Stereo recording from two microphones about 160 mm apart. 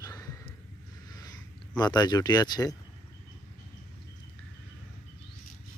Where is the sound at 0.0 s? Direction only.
20° left (ahead or behind).